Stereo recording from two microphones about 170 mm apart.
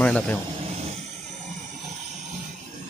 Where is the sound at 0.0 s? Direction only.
10° left (ahead or behind).